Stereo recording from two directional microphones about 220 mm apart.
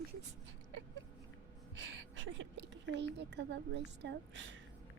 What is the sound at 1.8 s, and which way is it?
A woman's voice, 60° right (ahead or behind).